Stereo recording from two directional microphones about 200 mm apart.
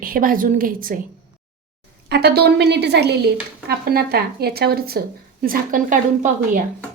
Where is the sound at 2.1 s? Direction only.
55° right (ahead or behind).